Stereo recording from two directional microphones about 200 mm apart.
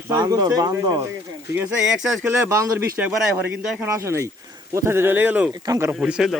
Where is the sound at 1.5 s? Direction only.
5° right (ahead or behind).